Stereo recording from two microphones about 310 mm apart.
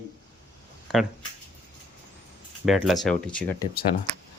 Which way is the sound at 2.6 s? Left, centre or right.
Centre.